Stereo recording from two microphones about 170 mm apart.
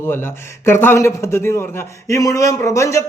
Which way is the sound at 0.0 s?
15° left (ahead or behind).